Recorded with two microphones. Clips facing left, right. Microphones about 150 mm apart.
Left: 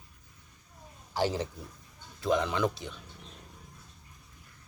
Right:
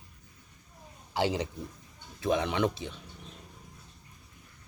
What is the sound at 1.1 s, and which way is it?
Speech, 15° right (ahead or behind).